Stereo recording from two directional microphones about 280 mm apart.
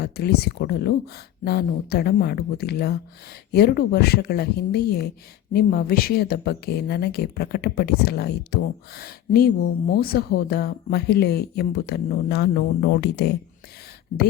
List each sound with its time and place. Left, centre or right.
0.0 s speech: left